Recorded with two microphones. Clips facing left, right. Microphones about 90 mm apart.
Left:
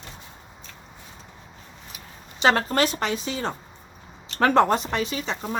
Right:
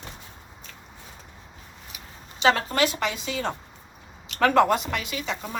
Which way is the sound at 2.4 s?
40° left (ahead or behind).